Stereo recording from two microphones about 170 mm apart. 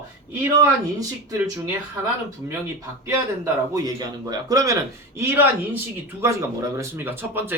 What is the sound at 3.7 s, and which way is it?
A man's voice, 20° right (ahead or behind).